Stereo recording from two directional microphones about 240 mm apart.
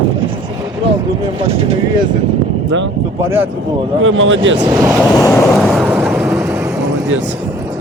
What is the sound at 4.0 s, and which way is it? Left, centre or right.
Speech, right.